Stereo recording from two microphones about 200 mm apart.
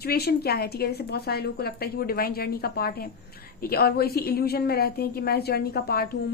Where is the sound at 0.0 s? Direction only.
50° left (ahead or behind).